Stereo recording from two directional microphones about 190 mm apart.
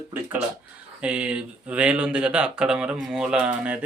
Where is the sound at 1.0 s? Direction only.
5° right (ahead or behind).